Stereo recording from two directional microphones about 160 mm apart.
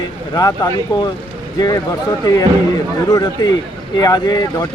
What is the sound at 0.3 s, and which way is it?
Speech, 25° left (ahead or behind).